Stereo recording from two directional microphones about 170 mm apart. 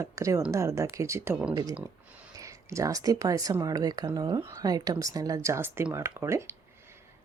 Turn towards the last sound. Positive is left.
turn(degrees=-15)  # may be behind; listen again after turning